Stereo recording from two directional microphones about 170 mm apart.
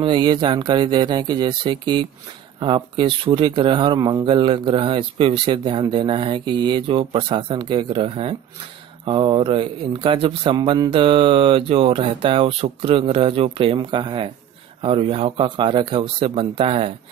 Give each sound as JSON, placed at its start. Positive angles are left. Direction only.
{"t": 0.0, "sound": "speech", "side_deg": -30}